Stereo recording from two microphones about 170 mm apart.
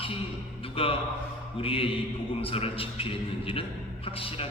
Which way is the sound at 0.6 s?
35° left (ahead or behind).